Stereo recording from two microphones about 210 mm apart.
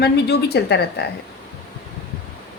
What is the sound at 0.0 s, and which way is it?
A woman's voice, 50° left (ahead or behind).